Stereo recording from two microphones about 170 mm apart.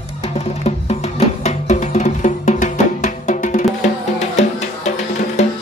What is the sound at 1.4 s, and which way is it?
Music, 40° left (ahead or behind).